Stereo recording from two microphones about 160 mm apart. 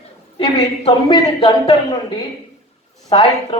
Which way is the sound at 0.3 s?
30° left (ahead or behind).